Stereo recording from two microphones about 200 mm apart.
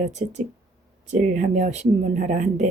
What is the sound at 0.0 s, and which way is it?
Speech, 35° right (ahead or behind).